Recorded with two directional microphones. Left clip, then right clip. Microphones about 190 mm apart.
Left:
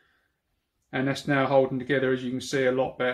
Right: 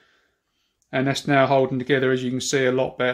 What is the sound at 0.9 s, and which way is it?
Speech, 55° right (ahead or behind).